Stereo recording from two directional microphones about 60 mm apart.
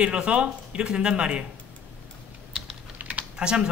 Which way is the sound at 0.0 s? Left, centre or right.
Centre.